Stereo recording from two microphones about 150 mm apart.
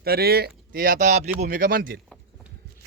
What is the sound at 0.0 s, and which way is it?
Speech, 90° right.